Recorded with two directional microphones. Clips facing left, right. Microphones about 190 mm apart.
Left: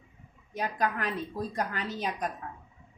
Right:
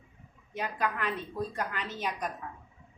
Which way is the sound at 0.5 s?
40° left (ahead or behind).